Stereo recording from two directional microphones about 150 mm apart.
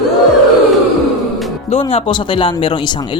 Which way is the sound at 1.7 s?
40° left (ahead or behind).